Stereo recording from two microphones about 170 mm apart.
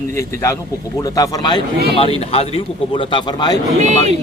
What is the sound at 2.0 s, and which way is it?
A man's voice, 35° left (ahead or behind).